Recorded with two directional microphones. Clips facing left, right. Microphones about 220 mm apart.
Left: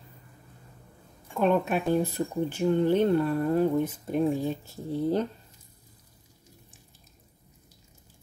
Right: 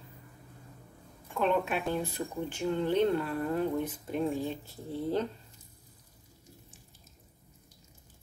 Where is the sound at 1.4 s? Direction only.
45° left (ahead or behind).